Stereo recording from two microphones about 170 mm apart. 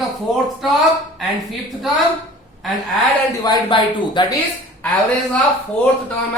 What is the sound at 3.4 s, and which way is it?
Speech, 25° left (ahead or behind).